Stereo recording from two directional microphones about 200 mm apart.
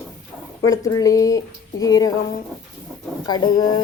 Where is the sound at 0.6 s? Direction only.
15° left (ahead or behind).